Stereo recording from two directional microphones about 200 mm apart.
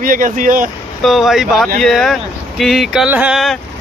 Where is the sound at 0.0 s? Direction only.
45° right (ahead or behind).